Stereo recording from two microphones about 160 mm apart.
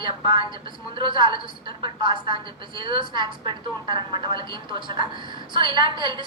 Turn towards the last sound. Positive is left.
turn(degrees=-30)  # may be behind; listen again after turning